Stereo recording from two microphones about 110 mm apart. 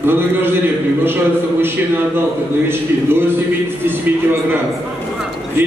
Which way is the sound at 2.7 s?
20° right (ahead or behind).